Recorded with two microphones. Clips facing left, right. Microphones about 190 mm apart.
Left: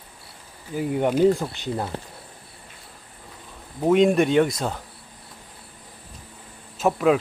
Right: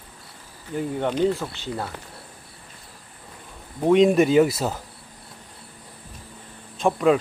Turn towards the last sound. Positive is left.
turn(degrees=5)  # may be behind; listen again after turning